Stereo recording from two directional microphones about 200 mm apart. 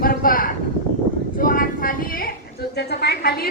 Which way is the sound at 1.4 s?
45° left (ahead or behind).